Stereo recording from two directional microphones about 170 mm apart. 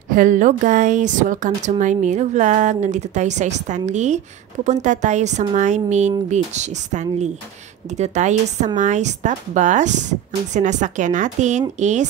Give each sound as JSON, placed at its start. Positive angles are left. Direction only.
{"t": 0.1, "sound": "a woman's voice", "side_deg": -50}